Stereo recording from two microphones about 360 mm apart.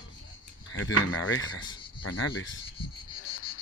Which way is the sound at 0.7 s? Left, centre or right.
Left.